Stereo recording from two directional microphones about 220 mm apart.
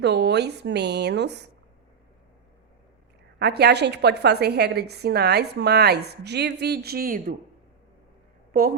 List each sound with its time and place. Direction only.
0.0 s a woman's voice: 50° right (ahead or behind)
3.3 s a woman's voice: 50° right (ahead or behind)
8.5 s a woman's voice: 40° right (ahead or behind)